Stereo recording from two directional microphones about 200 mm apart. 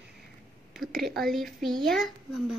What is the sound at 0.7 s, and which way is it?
A woman's voice, centre (ahead or behind).